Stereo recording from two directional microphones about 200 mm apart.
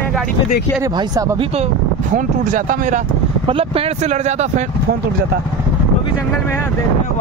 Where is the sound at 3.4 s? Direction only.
30° right (ahead or behind).